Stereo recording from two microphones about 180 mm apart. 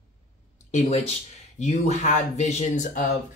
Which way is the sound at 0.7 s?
40° left (ahead or behind).